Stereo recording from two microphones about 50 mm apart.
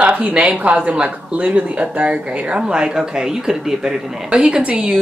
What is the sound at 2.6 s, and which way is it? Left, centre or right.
Speech, centre.